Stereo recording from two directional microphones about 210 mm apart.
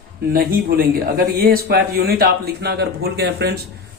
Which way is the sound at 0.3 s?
45° right (ahead or behind).